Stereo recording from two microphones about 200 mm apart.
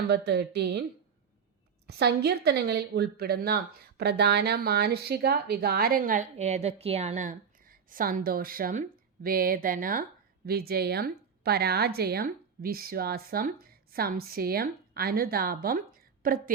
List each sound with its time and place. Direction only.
0.1 s speech: 55° right (ahead or behind)
1.9 s speech: 55° right (ahead or behind)